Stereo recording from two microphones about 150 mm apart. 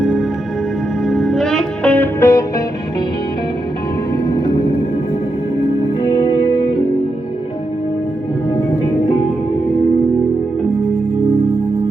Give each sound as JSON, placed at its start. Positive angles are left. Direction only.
{"t": 0.0, "sound": "music", "side_deg": 0}
{"t": 6.0, "sound": "music", "side_deg": 30}